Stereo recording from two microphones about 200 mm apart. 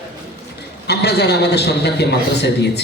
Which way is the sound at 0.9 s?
55° left (ahead or behind).